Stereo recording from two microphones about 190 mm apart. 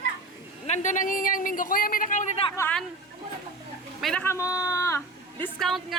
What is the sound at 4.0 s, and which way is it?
Speech, centre (ahead or behind).